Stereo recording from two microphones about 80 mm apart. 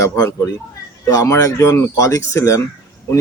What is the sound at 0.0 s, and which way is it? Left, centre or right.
Speech, left.